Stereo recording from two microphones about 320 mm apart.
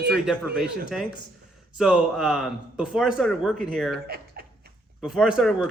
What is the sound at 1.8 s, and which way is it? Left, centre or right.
A man's voice, centre.